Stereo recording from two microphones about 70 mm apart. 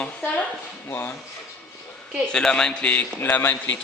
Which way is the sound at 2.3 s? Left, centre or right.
Centre.